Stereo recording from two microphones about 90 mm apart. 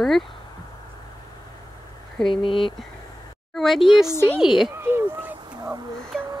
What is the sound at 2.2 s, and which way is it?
Speech, 65° left (ahead or behind).